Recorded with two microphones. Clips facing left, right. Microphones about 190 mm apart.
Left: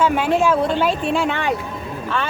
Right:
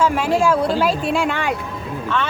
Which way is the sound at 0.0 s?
Centre (ahead or behind).